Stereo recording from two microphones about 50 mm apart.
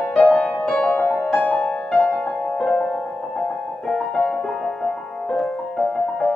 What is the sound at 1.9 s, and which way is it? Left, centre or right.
Music, centre.